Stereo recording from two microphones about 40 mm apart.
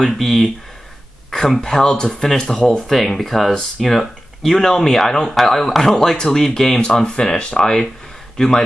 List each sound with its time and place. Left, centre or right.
0.0 s speech: centre
1.6 s speech: centre
2.2 s speech: centre